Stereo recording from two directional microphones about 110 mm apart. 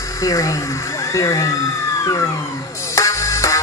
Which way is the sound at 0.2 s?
30° left (ahead or behind).